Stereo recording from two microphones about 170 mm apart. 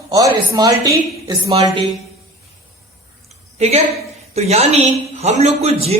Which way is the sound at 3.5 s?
40° right (ahead or behind).